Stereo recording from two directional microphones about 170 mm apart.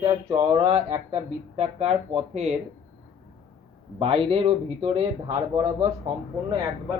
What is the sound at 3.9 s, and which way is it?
A man's voice, 35° right (ahead or behind).